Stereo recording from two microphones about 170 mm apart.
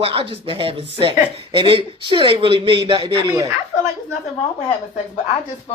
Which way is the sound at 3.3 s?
20° right (ahead or behind).